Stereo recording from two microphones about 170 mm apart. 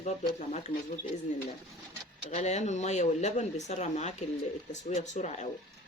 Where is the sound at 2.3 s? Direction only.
40° left (ahead or behind).